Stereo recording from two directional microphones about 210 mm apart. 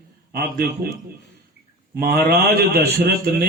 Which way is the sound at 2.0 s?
45° right (ahead or behind).